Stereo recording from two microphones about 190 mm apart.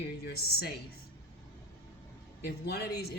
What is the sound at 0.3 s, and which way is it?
Speech, 55° left (ahead or behind).